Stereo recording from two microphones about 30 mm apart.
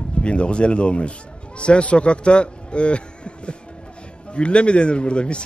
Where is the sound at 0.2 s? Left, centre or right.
Left.